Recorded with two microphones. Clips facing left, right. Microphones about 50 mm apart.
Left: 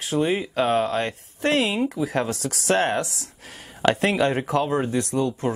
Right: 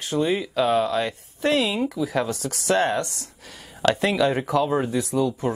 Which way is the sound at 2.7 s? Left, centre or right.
Centre.